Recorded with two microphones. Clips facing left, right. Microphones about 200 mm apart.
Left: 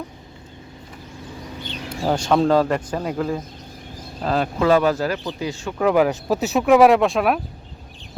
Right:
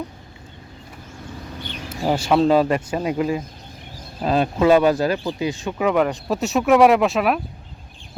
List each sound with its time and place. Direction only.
1.9 s speech: 5° right (ahead or behind)
5.8 s speech: 5° left (ahead or behind)